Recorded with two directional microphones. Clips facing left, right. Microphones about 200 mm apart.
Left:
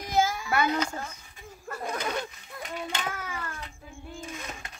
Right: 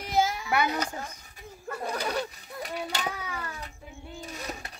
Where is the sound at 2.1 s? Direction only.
35° right (ahead or behind).